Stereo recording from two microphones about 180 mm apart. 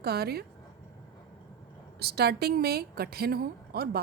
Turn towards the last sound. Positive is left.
turn(degrees=-60)  # may be behind; listen again after turning